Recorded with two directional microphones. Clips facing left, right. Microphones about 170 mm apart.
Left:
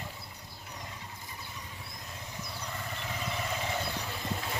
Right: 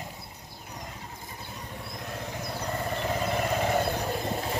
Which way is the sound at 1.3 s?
50° right (ahead or behind).